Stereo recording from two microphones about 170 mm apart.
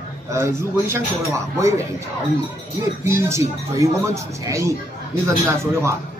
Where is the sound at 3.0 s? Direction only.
15° right (ahead or behind).